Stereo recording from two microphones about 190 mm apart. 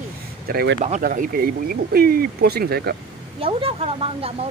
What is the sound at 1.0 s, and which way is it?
Speech, 45° right (ahead or behind).